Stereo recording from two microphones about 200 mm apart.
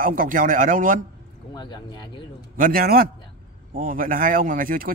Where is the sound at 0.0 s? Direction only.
40° right (ahead or behind).